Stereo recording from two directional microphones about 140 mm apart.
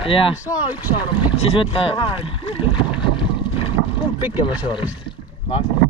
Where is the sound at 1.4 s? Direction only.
40° left (ahead or behind).